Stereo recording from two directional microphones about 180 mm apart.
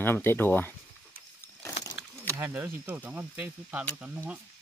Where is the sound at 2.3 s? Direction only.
10° right (ahead or behind).